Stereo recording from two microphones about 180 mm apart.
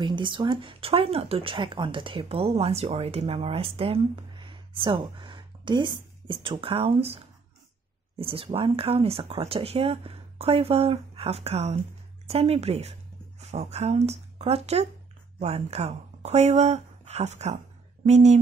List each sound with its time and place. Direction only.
0.0 s speech: 25° right (ahead or behind)
8.2 s speech: 30° right (ahead or behind)